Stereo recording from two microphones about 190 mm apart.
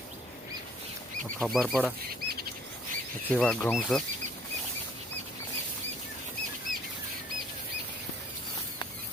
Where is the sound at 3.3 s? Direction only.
5° left (ahead or behind).